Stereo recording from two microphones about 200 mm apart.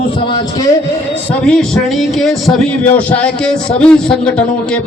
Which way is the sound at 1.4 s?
5° left (ahead or behind).